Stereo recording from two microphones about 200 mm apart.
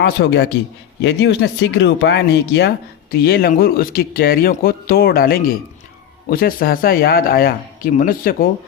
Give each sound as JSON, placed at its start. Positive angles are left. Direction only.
{"t": 0.0, "sound": "a man's voice", "side_deg": 55}